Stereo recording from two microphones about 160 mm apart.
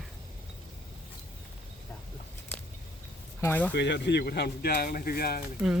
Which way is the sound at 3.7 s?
90° left.